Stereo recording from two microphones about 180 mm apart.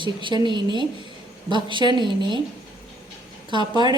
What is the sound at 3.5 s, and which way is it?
Speech, 25° right (ahead or behind).